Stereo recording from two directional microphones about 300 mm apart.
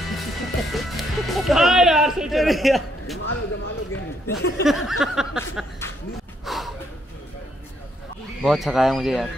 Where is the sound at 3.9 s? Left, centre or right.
Left.